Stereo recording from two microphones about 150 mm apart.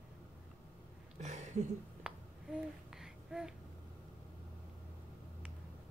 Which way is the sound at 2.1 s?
5° right (ahead or behind).